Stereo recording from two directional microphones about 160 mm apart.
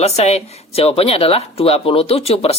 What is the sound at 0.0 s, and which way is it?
Speech, 40° left (ahead or behind).